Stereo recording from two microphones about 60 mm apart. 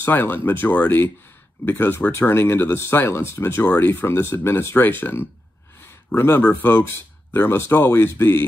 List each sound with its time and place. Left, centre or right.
0.0 s speech: left
4.8 s speech: left